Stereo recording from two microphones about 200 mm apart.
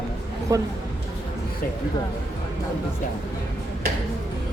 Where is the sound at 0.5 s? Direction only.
20° right (ahead or behind).